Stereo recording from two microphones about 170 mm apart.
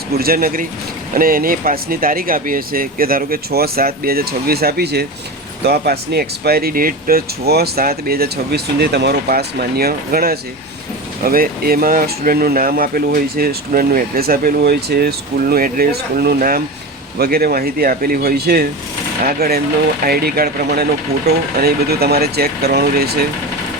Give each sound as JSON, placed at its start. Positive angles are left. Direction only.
{"t": 0.1, "sound": "speech", "side_deg": -60}